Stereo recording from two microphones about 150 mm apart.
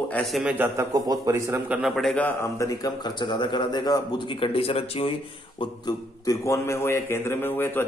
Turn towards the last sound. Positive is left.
turn(degrees=15)  # may be behind; listen again after turning